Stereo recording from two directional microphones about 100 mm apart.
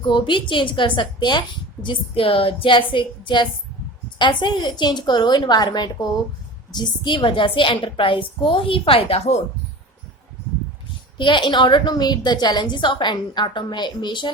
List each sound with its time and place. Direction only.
0.0 s a woman's voice: 55° left (ahead or behind); by 9.4 s 90° left
11.2 s a woman's voice: 55° left (ahead or behind)